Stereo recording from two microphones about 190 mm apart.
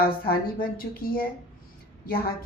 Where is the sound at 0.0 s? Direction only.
50° left (ahead or behind).